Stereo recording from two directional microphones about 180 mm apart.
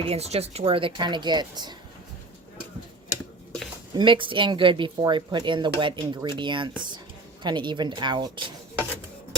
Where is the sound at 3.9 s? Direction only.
25° right (ahead or behind).